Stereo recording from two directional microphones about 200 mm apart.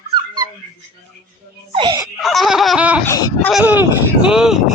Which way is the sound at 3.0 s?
15° left (ahead or behind).